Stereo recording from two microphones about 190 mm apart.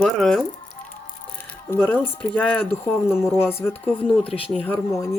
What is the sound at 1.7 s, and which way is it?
Speech, 10° left (ahead or behind).